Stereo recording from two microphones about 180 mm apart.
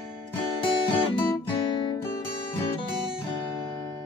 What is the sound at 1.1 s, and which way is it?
Guitar, 25° left (ahead or behind).